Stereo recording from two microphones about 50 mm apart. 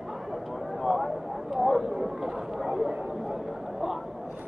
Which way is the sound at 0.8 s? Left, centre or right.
Centre.